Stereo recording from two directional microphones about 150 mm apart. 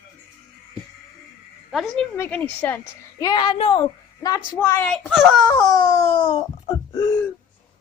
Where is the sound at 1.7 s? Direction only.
Centre (ahead or behind).